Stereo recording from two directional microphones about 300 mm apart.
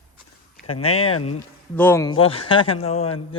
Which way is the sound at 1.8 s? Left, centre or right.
Centre.